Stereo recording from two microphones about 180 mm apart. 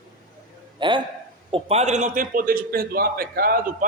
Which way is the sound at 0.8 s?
25° right (ahead or behind).